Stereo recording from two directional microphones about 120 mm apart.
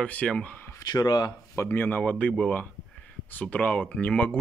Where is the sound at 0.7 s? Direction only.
30° left (ahead or behind).